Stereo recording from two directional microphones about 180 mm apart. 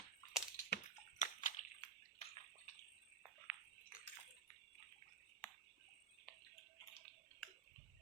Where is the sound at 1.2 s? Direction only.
45° left (ahead or behind).